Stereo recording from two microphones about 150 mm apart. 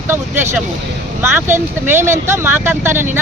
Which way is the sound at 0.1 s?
15° right (ahead or behind).